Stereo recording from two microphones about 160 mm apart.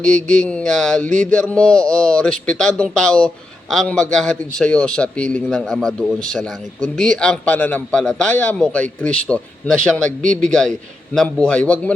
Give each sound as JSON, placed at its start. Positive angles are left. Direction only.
{"t": 0.0, "sound": "a man's voice", "side_deg": -55}
{"t": 0.4, "sound": "a man's voice", "side_deg": 5}
{"t": 10.1, "sound": "a man's voice", "side_deg": -50}
{"t": 11.1, "sound": "a man's voice", "side_deg": 5}